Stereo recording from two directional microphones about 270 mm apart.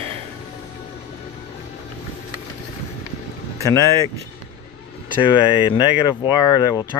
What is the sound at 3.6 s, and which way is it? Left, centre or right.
Speech, centre.